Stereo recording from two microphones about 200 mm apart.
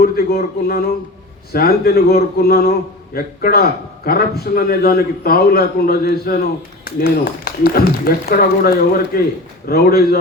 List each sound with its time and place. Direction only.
0.0 s a man's voice: 50° left (ahead or behind)